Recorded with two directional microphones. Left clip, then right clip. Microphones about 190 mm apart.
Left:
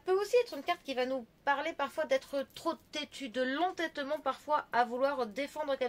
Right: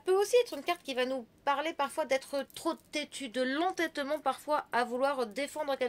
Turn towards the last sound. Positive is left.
turn(degrees=-45)  # may be behind; listen again after turning